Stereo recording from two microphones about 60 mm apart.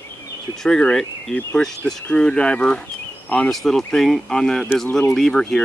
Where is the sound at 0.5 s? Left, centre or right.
Centre.